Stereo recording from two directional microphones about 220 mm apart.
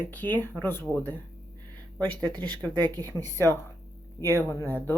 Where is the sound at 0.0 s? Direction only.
10° left (ahead or behind).